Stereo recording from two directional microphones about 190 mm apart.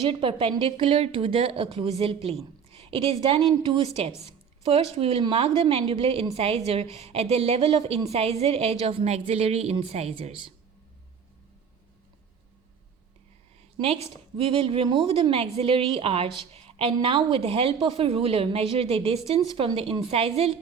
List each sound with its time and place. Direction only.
0.1 s a woman's voice: 25° right (ahead or behind)
13.7 s a woman's voice: 30° right (ahead or behind)